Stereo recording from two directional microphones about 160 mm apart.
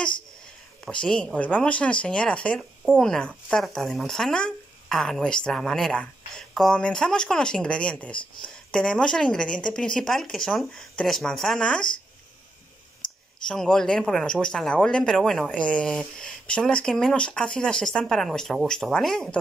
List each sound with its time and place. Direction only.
0.8 s speech: 5° left (ahead or behind)
13.0 s clicking: 30° left (ahead or behind)
13.5 s speech: 5° left (ahead or behind)